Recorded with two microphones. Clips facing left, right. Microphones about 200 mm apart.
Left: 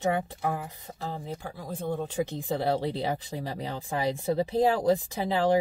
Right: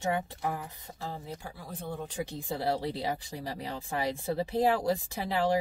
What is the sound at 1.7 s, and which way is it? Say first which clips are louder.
Speech: left 7 dB; 20° left (ahead or behind).